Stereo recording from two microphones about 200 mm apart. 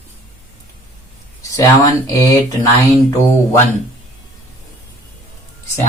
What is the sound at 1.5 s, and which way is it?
Speech, 15° left (ahead or behind).